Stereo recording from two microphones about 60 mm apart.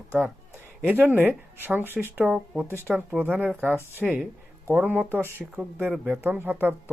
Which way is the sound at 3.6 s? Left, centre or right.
Right.